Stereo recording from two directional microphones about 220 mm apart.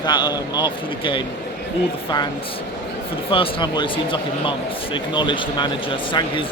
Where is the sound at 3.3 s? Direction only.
25° left (ahead or behind).